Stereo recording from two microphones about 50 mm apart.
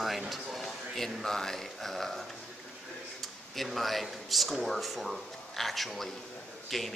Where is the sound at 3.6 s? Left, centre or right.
Centre.